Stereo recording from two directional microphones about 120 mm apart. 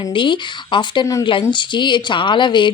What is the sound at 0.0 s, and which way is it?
Speech, 40° left (ahead or behind).